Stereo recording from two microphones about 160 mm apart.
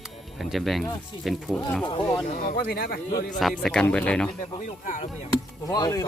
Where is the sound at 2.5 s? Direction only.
75° left (ahead or behind).